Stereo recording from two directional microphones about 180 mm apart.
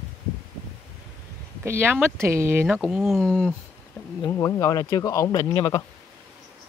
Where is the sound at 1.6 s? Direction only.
15° right (ahead or behind); by 3.5 s 5° left (ahead or behind).